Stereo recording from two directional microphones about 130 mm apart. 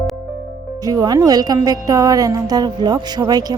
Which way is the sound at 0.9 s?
30° right (ahead or behind).